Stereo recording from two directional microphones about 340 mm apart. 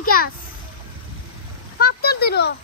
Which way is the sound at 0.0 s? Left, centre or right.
Left.